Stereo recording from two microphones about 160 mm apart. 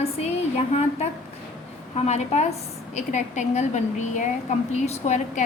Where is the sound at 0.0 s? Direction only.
40° left (ahead or behind).